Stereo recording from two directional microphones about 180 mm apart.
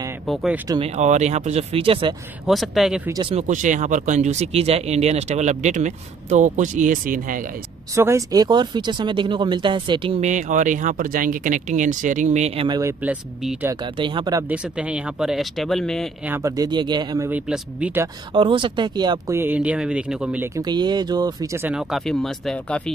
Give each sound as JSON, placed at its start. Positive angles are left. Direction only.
{"t": 0.3, "sound": "speech", "side_deg": 0}
{"t": 0.9, "sound": "speech", "side_deg": -40}
{"t": 2.4, "sound": "speech", "side_deg": 0}
{"t": 3.1, "sound": "speech", "side_deg": -25}
{"t": 3.3, "sound": "speech", "side_deg": -45}
{"t": 7.9, "sound": "speech", "side_deg": -15}
{"t": 13.0, "sound": "speech", "side_deg": -5}
{"t": 13.9, "sound": "speech", "side_deg": -25}
{"t": 14.5, "sound": "speech", "side_deg": -5}
{"t": 16.3, "sound": "speech", "side_deg": -20}
{"t": 17.3, "sound": "speech", "side_deg": -5}
{"t": 18.3, "sound": "speech", "side_deg": -30}
{"t": 20.5, "sound": "speech", "side_deg": -25}
{"t": 21.6, "sound": "speech", "side_deg": 0}